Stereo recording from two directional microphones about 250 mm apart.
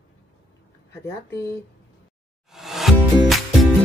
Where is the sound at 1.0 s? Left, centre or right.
Centre.